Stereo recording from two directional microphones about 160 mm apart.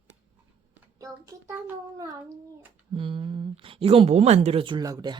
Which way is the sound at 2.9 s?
35° right (ahead or behind).